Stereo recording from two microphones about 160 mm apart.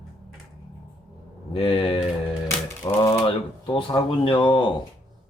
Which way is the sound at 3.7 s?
30° left (ahead or behind).